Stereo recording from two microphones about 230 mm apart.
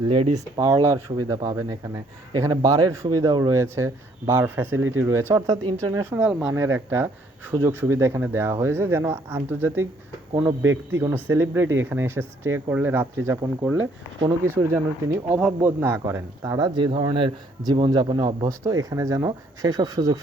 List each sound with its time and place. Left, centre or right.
0.3 s speech: centre
4.8 s speech: right
5.3 s speech: centre